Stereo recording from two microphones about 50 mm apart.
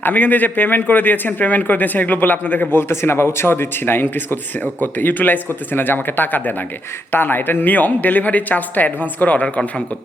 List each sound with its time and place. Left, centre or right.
0.0 s speech: left
2.7 s speech: left